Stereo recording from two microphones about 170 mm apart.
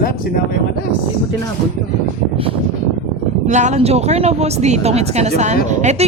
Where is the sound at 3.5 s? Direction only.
45° right (ahead or behind).